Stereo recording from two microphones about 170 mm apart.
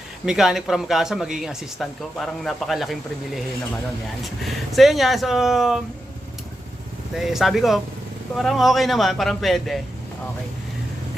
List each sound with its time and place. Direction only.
0.3 s speech: centre (ahead or behind)
7.1 s speech: centre (ahead or behind)